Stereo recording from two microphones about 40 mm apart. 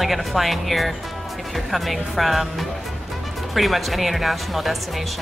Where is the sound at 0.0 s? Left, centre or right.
Centre.